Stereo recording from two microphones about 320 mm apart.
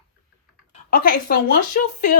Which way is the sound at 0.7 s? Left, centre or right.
Left.